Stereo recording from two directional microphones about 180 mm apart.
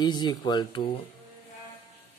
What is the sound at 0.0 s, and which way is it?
Speech, 25° left (ahead or behind).